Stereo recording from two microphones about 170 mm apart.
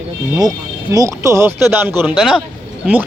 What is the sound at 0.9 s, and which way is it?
Speech, 20° right (ahead or behind).